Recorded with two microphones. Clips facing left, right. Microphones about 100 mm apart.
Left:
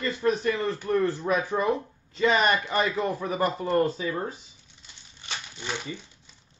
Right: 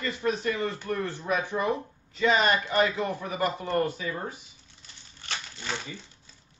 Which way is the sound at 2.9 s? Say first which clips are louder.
Left 3 dB; 35° left (ahead or behind).